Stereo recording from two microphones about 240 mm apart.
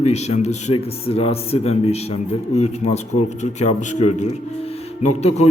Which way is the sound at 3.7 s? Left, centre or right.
Left.